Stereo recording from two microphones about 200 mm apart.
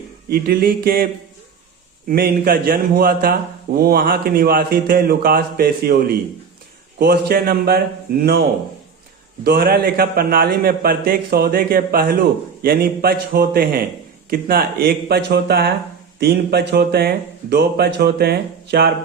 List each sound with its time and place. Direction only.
0.3 s a man's voice: 50° right (ahead or behind)
2.0 s a man's voice: 50° right (ahead or behind)